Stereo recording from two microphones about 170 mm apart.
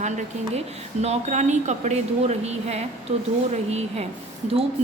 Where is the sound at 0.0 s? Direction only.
45° right (ahead or behind).